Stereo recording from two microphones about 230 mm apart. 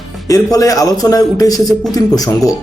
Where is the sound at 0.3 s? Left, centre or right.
Centre.